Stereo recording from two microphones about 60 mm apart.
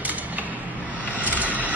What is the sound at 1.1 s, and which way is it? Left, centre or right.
Vehicle, right.